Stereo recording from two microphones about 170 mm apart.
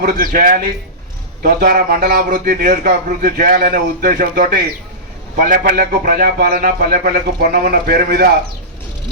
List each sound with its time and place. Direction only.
0.0 s a man's voice: 60° right (ahead or behind)